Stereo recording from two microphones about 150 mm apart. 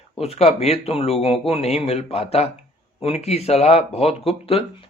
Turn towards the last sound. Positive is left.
turn(degrees=40)  # may be behind; listen again after turning